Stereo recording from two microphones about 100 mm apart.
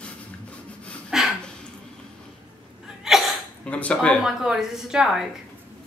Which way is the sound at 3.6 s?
10° left (ahead or behind).